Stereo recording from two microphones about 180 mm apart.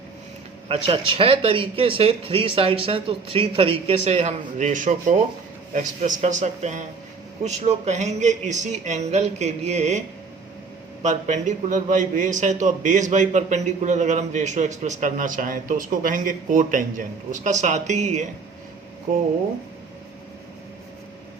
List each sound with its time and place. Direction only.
0.7 s speech: 30° right (ahead or behind)
11.0 s a man's voice: 40° right (ahead or behind)